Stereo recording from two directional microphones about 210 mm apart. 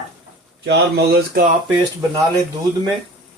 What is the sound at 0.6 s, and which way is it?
Speech, 50° right (ahead or behind).